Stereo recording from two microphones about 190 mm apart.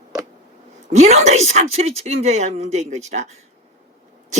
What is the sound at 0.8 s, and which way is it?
Speech, 35° right (ahead or behind).